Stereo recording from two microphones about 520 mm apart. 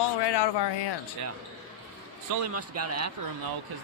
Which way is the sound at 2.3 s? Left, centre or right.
Right.